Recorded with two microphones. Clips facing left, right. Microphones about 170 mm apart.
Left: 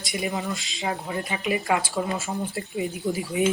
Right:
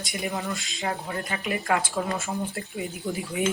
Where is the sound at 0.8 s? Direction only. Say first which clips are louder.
Left 2 dB; 20° left (ahead or behind).